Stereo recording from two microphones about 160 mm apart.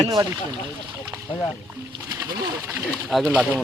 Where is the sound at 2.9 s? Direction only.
5° left (ahead or behind).